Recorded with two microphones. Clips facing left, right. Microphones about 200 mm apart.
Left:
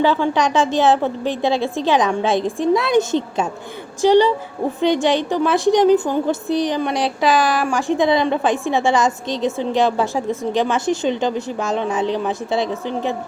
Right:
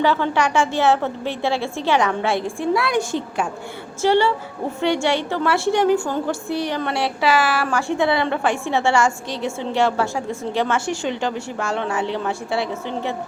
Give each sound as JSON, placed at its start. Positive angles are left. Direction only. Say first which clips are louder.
{"t": 0.0, "sound": "a woman's voice", "louder": "left 2 dB", "side_deg": 15}